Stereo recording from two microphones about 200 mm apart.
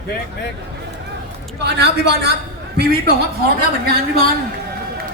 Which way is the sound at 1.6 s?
55° right (ahead or behind).